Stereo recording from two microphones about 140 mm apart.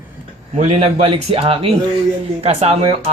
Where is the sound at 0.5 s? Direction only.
55° right (ahead or behind).